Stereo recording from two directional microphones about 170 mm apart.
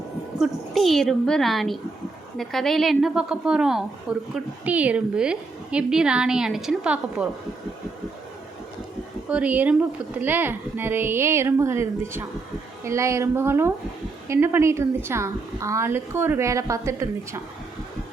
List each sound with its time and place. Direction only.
0.3 s a woman's voice: centre (ahead or behind)
9.3 s a woman's voice: 10° right (ahead or behind)